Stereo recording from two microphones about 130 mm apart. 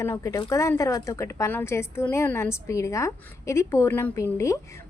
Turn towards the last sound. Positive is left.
turn(degrees=20)  # may be behind; listen again after turning